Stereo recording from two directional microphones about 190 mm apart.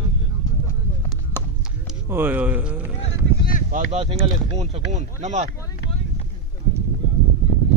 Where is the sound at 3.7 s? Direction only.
40° right (ahead or behind).